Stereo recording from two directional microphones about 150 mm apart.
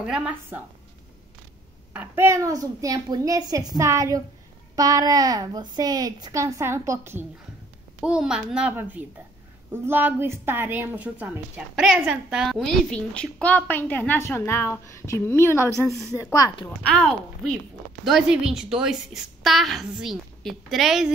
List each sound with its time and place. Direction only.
0.0 s a woman's voice: 5° right (ahead or behind)
2.0 s a woman's voice: 15° right (ahead or behind)
8.0 s a woman's voice: 5° right (ahead or behind); by 16.6 s 25° left (ahead or behind)
16.6 s a woman's voice: 5° left (ahead or behind)